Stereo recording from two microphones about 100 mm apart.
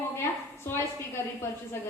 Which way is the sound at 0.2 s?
25° left (ahead or behind).